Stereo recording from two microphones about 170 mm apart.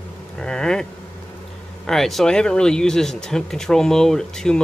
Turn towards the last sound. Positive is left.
turn(degrees=5)  # may be behind; listen again after turning